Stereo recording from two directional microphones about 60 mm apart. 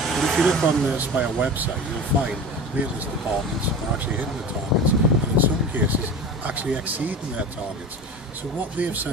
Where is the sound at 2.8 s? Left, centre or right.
Right.